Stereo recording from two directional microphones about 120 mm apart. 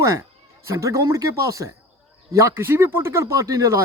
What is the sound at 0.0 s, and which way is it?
Speech, 25° right (ahead or behind).